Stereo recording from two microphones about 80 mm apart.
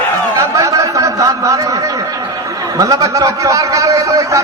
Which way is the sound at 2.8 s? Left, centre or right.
Right.